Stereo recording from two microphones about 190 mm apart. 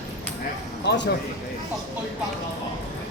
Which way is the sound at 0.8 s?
65° left (ahead or behind).